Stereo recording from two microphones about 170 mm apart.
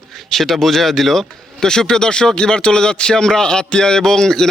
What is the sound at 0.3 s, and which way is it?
Speech, centre (ahead or behind).